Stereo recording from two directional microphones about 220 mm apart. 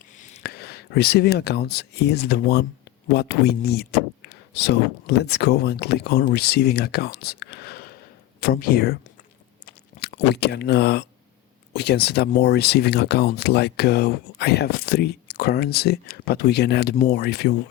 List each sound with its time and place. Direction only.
0.2 s speech: 40° left (ahead or behind)
10.0 s speech: 45° left (ahead or behind)